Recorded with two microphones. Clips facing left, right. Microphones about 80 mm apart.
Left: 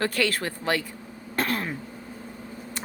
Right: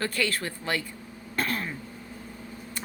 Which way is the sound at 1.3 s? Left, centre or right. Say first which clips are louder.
Left 3 dB; left.